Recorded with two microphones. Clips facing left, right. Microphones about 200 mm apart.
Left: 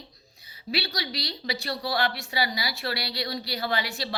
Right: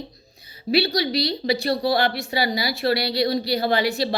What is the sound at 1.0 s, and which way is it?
Speech, 70° right (ahead or behind).